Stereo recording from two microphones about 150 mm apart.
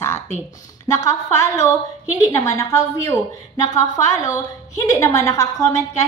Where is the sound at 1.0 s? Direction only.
20° left (ahead or behind).